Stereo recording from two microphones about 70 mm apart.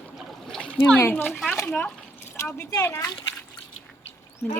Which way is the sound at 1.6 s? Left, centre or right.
Left.